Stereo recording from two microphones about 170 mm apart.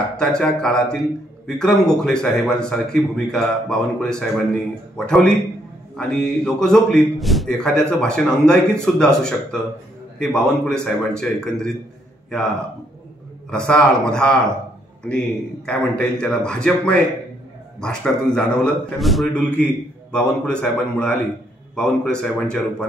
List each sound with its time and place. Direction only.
0.2 s a man's voice: 5° left (ahead or behind)
13.5 s a man's voice: 5° left (ahead or behind)